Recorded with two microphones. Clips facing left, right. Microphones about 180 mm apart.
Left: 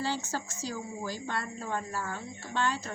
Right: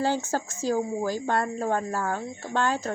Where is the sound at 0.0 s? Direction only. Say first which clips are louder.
Right 7 dB; 50° right (ahead or behind).